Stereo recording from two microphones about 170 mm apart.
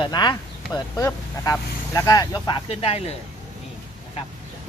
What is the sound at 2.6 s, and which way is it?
Speech, 35° left (ahead or behind).